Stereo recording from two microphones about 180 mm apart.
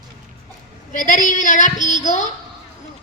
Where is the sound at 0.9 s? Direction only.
45° left (ahead or behind).